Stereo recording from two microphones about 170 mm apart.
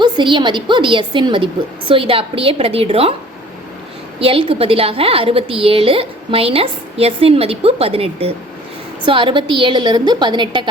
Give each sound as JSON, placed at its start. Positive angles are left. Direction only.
{"t": 0.0, "sound": "a woman's voice", "side_deg": -25}
{"t": 4.2, "sound": "a woman's voice", "side_deg": -35}